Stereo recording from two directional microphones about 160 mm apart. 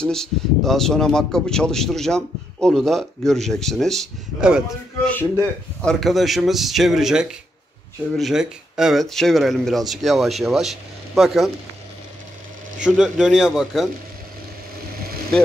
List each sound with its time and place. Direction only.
0.0 s speech: 5° left (ahead or behind)
5.0 s speech: 10° left (ahead or behind)
12.8 s speech: 5° right (ahead or behind)